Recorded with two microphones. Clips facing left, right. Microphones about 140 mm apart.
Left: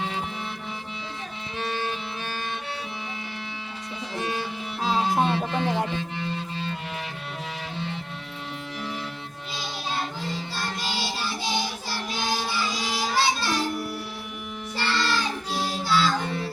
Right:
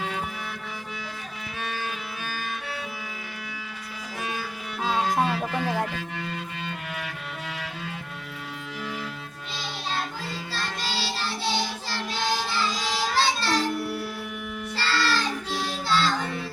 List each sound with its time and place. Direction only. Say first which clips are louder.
1.6 s music: left 4 dB; 30° left (ahead or behind)
4.2 s music: left 3 dB; 30° left (ahead or behind)
10.5 s child singing: left 1 dB; 15° left (ahead or behind)
14.8 s music: even; 15° left (ahead or behind)
15.4 s music: left 1 dB; 35° left (ahead or behind)
15.8 s child singing: left 1 dB; 10° left (ahead or behind)